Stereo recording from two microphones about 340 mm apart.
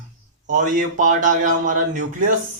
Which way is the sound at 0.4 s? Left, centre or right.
Right.